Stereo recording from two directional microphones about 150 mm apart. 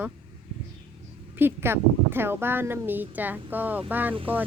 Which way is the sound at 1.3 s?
15° right (ahead or behind).